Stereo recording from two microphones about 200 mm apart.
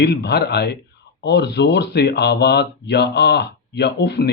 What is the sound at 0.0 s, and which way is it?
Speech, 55° left (ahead or behind).